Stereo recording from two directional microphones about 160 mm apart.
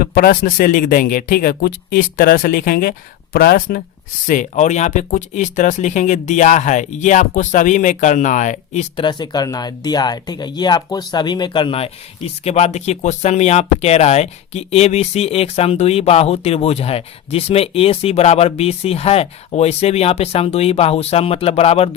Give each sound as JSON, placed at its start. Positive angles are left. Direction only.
{"t": 0.0, "sound": "speech", "side_deg": 65}
{"t": 4.3, "sound": "speech", "side_deg": 50}
{"t": 9.0, "sound": "speech", "side_deg": 30}